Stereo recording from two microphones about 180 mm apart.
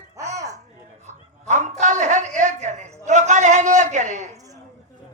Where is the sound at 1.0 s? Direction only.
40° right (ahead or behind).